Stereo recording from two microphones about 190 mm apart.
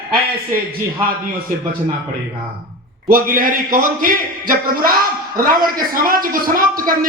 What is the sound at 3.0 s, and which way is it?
A man's voice, 50° right (ahead or behind).